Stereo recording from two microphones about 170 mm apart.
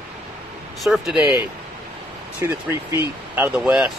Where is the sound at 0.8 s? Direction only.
Centre (ahead or behind).